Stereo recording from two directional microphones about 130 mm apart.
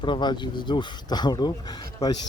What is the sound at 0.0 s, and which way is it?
A man's voice, 35° left (ahead or behind).